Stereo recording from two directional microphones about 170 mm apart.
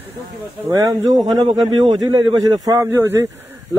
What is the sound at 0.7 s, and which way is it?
Speech, 25° right (ahead or behind).